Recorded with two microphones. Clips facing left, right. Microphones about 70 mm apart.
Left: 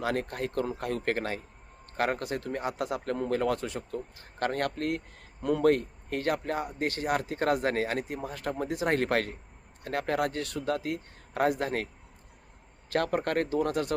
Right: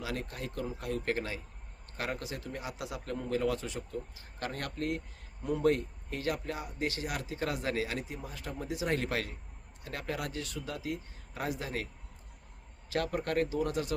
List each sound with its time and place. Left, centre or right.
0.0 s speech: left
12.9 s speech: left